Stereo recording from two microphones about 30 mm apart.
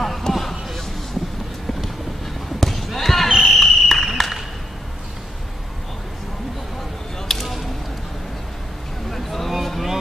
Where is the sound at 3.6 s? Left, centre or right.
Centre.